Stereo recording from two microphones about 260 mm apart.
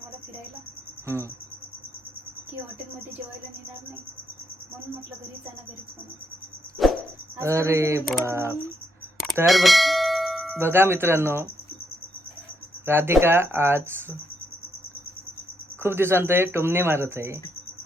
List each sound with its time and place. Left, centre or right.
1.0 s speech: centre
6.8 s music: centre
7.3 s speech: centre
9.2 s bell: centre
12.8 s speech: centre
15.8 s speech: centre